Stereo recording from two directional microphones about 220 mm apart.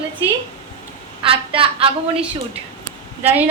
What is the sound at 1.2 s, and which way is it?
Speech, 25° right (ahead or behind).